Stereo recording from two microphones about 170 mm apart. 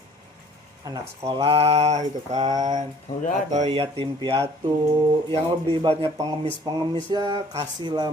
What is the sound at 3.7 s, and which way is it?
Mantra, 30° right (ahead or behind).